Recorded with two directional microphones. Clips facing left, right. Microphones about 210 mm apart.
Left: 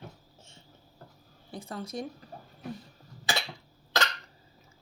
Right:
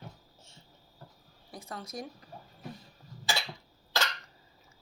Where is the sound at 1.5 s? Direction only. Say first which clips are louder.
Left 4 dB; 30° left (ahead or behind).